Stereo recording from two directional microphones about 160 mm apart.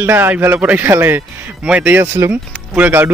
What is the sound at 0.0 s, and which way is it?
A man's voice, 15° right (ahead or behind).